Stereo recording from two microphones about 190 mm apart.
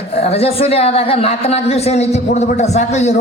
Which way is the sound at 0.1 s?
30° left (ahead or behind).